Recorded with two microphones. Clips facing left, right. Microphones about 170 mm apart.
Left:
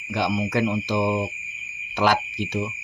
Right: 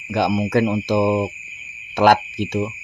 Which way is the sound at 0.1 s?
45° right (ahead or behind).